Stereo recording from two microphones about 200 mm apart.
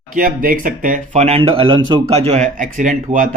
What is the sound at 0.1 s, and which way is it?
Speech, 45° right (ahead or behind).